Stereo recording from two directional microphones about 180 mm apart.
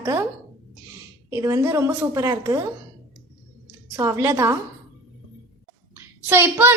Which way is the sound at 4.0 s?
15° right (ahead or behind).